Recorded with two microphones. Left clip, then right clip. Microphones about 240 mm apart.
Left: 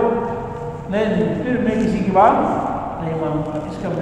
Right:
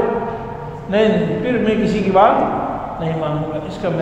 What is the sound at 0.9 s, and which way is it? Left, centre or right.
Speech, right.